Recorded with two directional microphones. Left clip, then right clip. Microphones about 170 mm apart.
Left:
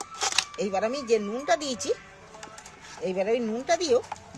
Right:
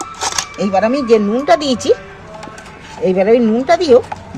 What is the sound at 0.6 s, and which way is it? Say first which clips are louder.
Speech: right 16 dB; 50° left (ahead or behind).